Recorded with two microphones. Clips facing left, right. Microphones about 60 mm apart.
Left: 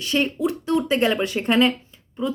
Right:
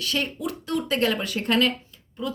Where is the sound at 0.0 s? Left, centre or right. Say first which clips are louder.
Left 6 dB; left.